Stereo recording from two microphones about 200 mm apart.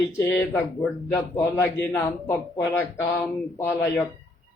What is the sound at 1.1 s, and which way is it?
Speech, 10° left (ahead or behind).